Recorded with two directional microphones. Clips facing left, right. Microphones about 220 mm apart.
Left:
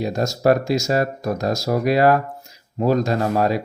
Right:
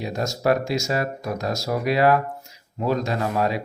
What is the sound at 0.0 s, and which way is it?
Speech, 40° left (ahead or behind).